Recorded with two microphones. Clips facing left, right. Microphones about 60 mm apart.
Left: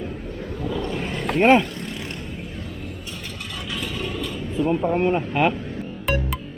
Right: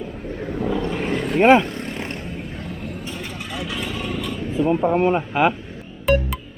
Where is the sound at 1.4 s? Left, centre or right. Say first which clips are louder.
Right 2 dB; centre.